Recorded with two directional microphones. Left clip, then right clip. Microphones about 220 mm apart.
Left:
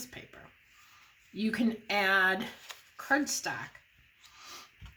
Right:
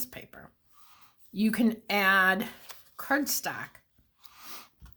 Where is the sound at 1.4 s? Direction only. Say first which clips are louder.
Right 4 dB; 45° right (ahead or behind).